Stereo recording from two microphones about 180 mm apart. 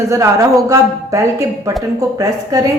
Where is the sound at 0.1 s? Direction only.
15° right (ahead or behind).